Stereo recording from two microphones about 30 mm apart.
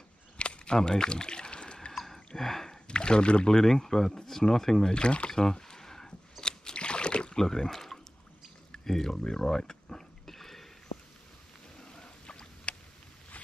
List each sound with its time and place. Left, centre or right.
0.4 s a sound: left
0.7 s speech: left
1.9 s a sound: centre
2.9 s speech: left
3.6 s speech: centre
4.9 s speech: left
5.3 s rowboat: left
6.4 s rowboat: left
7.3 s speech: centre
9.2 s a sound: left
12.3 s boat: left